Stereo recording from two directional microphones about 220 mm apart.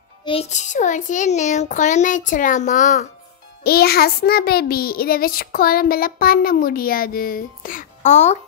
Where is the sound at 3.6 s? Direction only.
45° left (ahead or behind).